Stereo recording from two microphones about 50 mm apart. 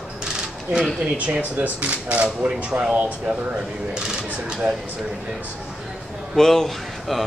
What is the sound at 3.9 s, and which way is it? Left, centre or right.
Speech, centre.